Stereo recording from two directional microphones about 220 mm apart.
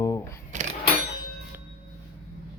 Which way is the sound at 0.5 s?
35° right (ahead or behind).